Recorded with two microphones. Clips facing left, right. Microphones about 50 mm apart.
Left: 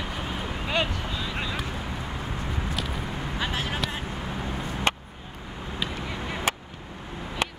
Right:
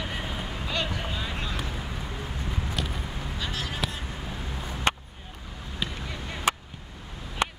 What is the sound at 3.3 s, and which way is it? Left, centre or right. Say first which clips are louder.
Vehicle: left 4 dB; left.